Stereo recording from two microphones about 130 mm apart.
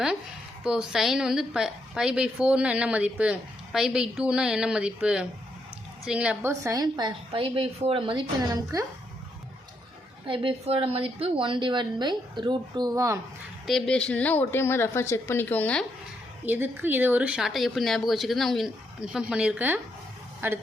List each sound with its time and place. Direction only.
0.6 s a woman's voice: 5° right (ahead or behind)
6.5 s a woman's voice: 25° right (ahead or behind)
10.2 s a woman's voice: 40° right (ahead or behind); by 13.1 s 25° right (ahead or behind)
13.7 s a woman's voice: 5° left (ahead or behind)
16.5 s speech: 15° right (ahead or behind)